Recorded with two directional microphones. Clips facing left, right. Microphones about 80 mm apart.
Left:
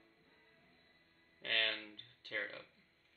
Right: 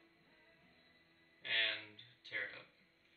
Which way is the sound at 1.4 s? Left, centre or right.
Left.